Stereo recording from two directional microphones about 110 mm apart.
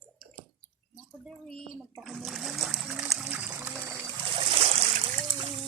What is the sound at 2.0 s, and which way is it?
Trickle, centre (ahead or behind).